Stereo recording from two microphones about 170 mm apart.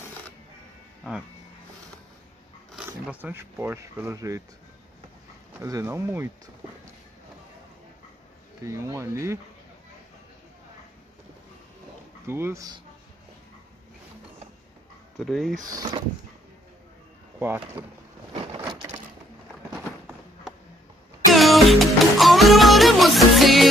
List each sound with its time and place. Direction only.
2.7 s speech: 10° right (ahead or behind)
5.6 s speech: 20° right (ahead or behind)
8.6 s speech: 15° right (ahead or behind)
12.3 s speech: 15° right (ahead or behind)
15.1 s speech: centre (ahead or behind)
15.7 s speech: 25° right (ahead or behind)
17.4 s speech: 10° right (ahead or behind)
18.3 s vehicle: 30° right (ahead or behind)
18.7 s a sound: 20° right (ahead or behind)
21.3 s music: centre (ahead or behind)